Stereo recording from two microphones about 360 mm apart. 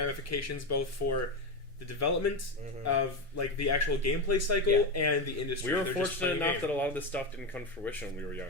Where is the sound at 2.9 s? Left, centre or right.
Left.